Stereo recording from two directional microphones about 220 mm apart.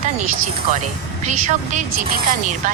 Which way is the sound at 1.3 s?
35° right (ahead or behind).